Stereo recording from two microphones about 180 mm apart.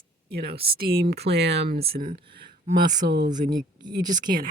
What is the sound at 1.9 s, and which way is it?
Speech, 55° right (ahead or behind).